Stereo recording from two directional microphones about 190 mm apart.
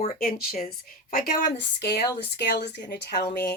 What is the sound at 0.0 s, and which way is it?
Speech, 40° left (ahead or behind).